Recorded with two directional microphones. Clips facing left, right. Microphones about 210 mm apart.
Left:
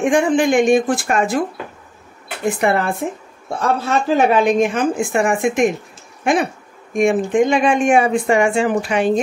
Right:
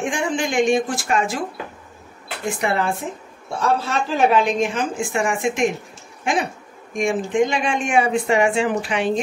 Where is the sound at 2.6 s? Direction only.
55° left (ahead or behind).